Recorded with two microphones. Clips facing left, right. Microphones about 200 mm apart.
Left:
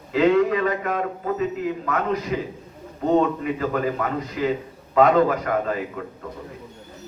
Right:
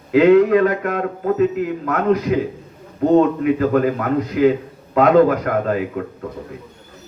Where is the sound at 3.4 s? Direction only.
55° right (ahead or behind).